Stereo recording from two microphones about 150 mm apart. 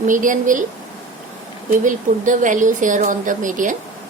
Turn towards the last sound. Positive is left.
turn(degrees=-60)  # may be behind; listen again after turning